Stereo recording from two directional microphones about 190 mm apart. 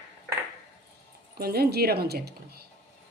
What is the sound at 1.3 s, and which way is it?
A woman's voice, 55° right (ahead or behind).